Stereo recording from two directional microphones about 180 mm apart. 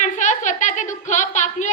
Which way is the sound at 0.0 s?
45° left (ahead or behind).